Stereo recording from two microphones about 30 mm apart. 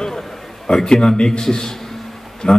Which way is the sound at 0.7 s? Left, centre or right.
Left.